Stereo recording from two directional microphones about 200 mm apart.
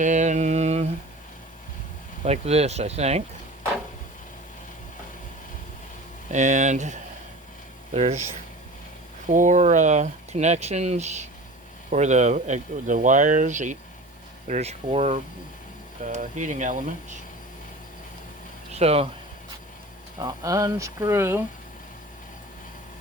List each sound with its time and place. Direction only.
0.0 s mantra: 35° right (ahead or behind)
2.2 s speech: 30° right (ahead or behind)
6.3 s speech: 35° right (ahead or behind)
9.2 s speech: 40° right (ahead or behind)
18.7 s speech: 30° right (ahead or behind)
20.1 s speech: 20° right (ahead or behind)